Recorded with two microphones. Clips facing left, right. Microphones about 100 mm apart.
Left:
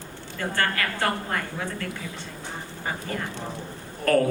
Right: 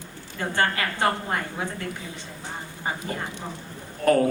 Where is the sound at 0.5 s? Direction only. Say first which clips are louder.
Right 2 dB; 20° right (ahead or behind).